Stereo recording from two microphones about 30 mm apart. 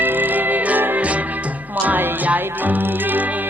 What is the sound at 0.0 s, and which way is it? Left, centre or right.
Music, right.